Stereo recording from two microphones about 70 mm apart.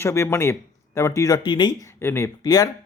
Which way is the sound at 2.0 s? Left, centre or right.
Left.